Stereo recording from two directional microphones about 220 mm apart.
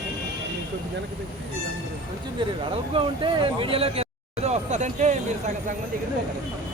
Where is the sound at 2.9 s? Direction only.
25° right (ahead or behind).